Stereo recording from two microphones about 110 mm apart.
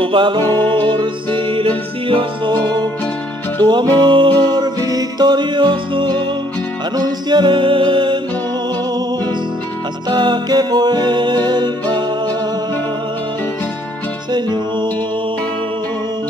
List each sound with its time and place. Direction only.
0.0 s music: 50° right (ahead or behind)
10.0 s music: 40° right (ahead or behind)
14.3 s music: 40° right (ahead or behind)